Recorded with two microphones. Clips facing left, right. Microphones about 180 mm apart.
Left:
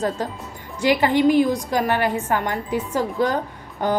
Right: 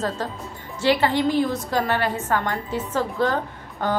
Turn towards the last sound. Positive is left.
turn(degrees=15)  # may be behind; listen again after turning